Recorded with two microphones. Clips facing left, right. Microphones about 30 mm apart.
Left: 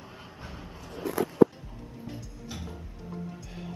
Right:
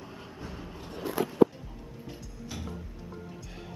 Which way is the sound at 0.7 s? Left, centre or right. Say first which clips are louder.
Even; right.